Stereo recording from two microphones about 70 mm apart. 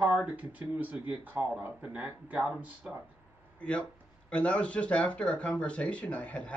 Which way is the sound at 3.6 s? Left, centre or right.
Centre.